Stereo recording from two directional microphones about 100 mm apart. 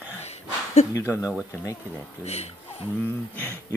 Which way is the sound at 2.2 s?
90° left.